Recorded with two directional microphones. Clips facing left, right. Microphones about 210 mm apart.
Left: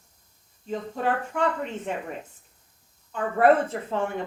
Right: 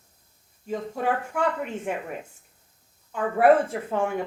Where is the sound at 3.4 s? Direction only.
10° right (ahead or behind).